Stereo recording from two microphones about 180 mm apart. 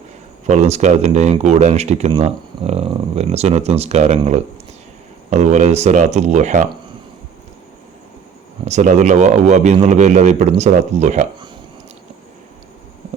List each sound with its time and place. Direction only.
0.4 s speech: 40° right (ahead or behind)
5.3 s speech: 40° right (ahead or behind)
8.6 s speech: 40° right (ahead or behind)